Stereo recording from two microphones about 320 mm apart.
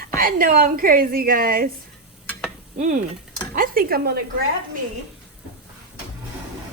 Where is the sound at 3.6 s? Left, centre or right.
Right.